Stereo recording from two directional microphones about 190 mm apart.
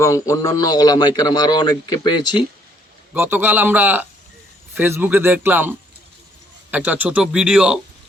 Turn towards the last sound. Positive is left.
turn(degrees=-5)  # may be behind; listen again after turning